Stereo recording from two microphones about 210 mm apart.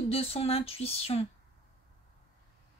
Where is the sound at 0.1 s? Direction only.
30° left (ahead or behind).